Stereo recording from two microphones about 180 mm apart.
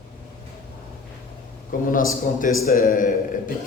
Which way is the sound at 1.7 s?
50° left (ahead or behind).